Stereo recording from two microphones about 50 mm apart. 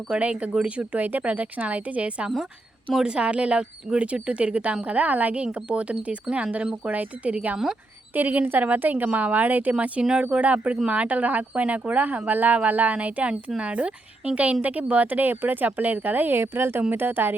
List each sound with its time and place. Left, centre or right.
0.1 s speech: right
0.9 s speech: right
10.0 s speech: centre
10.2 s speech: right
16.4 s speech: right
16.9 s speech: right